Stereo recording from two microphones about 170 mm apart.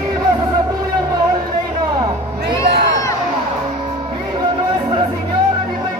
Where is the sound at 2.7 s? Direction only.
85° right.